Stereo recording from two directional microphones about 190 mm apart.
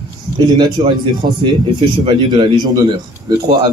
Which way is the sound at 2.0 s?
25° right (ahead or behind).